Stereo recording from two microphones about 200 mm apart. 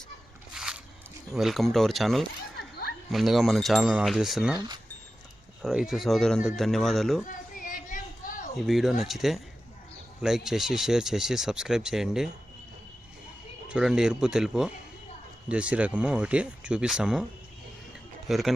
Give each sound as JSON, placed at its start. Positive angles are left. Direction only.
{"t": 0.5, "sound": "a sound", "side_deg": -5}
{"t": 1.3, "sound": "speech", "side_deg": 0}
{"t": 4.5, "sound": "speech", "side_deg": -20}
{"t": 5.6, "sound": "speech", "side_deg": 0}
{"t": 7.3, "sound": "a sound", "side_deg": 40}
{"t": 8.5, "sound": "speech", "side_deg": 0}
{"t": 13.7, "sound": "speech", "side_deg": -5}
{"t": 18.3, "sound": "speech", "side_deg": 0}